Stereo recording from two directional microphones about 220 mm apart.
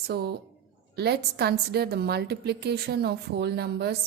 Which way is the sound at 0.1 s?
45° right (ahead or behind).